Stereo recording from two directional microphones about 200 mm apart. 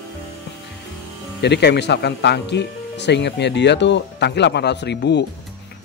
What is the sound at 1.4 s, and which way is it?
Speech, 55° left (ahead or behind).